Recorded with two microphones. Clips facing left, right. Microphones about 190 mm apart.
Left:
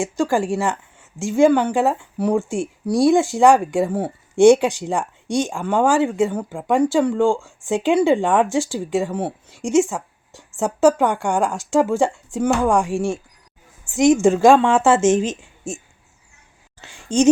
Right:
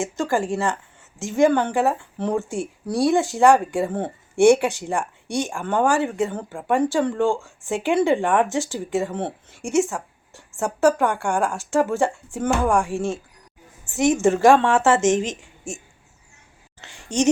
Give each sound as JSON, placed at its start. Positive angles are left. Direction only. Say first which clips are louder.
{"t": 0.0, "sound": "speech", "louder": "left 3 dB", "side_deg": 15}
{"t": 15.1, "sound": "a woman's voice", "louder": "left 3 dB", "side_deg": -15}
{"t": 16.8, "sound": "a sound", "louder": "left 1 dB", "side_deg": 15}